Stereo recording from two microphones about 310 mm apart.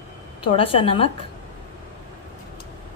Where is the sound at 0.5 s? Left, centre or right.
Centre.